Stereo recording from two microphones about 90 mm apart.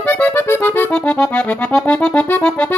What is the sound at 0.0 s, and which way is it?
Accordion, 20° left (ahead or behind).